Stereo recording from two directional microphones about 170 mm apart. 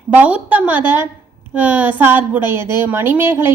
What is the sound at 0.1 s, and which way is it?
A woman's voice, 10° right (ahead or behind).